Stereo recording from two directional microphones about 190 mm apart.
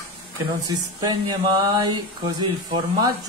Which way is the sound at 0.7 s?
20° right (ahead or behind).